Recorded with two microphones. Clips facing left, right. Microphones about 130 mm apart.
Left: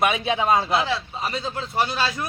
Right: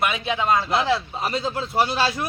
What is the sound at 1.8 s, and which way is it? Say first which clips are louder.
Speech: right 2 dB; 35° right (ahead or behind).